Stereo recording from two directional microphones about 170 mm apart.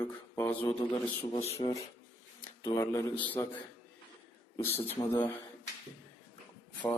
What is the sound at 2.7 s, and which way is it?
Speech, 15° left (ahead or behind).